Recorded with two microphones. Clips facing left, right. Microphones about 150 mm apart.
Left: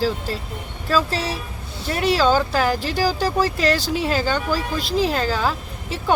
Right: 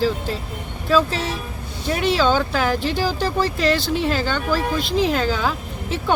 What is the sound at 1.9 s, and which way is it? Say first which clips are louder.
Speech: even; centre (ahead or behind).